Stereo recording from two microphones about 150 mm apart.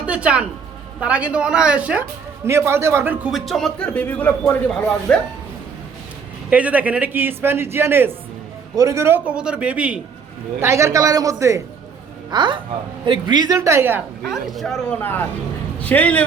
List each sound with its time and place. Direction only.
0.0 s speech: 10° right (ahead or behind)
3.3 s a man's voice: centre (ahead or behind)
6.5 s speech: 10° right (ahead or behind)
10.6 s a woman's voice: 20° right (ahead or behind)
12.3 s a woman's voice: 30° right (ahead or behind)
13.6 s speech: 15° right (ahead or behind)
14.3 s a man's voice: centre (ahead or behind)